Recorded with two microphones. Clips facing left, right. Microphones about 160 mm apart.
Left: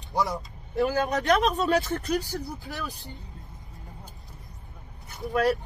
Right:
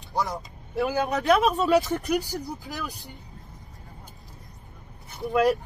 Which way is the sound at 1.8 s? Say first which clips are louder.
Right 2 dB; 15° right (ahead or behind).